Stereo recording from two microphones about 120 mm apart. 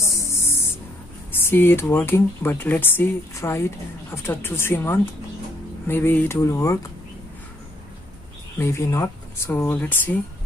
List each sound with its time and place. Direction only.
0.0 s a sound: 25° left (ahead or behind)
1.3 s a woman's voice: 20° left (ahead or behind)
8.5 s a woman's voice: 20° left (ahead or behind)